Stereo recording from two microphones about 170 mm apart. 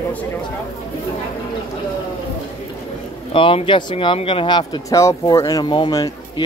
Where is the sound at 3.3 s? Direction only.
30° left (ahead or behind).